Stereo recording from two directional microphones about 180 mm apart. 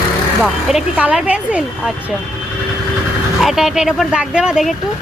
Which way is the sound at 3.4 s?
Centre (ahead or behind).